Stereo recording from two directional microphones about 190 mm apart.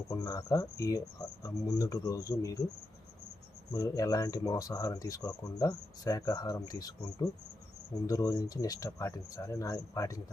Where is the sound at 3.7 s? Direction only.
20° left (ahead or behind).